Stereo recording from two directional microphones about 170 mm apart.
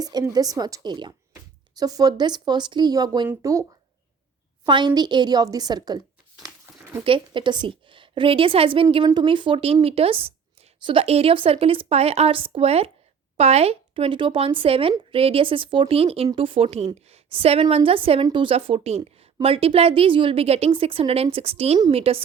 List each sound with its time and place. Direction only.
0.0 s speech: 25° right (ahead or behind)
7.0 s speech: 30° right (ahead or behind)